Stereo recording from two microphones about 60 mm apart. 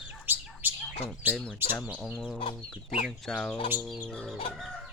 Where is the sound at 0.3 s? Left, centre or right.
Right.